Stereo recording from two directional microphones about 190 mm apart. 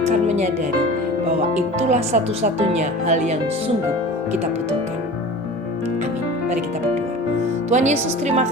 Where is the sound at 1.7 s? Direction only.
35° right (ahead or behind).